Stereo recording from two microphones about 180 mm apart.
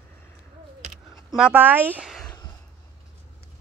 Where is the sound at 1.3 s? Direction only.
5° right (ahead or behind).